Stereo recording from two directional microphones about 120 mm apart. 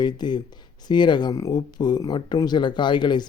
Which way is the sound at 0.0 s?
40° left (ahead or behind).